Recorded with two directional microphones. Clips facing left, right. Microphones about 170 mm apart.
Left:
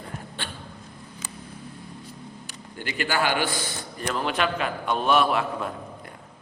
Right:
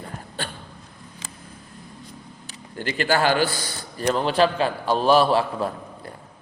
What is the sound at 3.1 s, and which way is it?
A man's voice, 40° right (ahead or behind).